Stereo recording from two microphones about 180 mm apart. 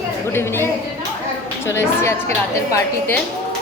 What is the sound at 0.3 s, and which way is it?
Speech, 15° left (ahead or behind).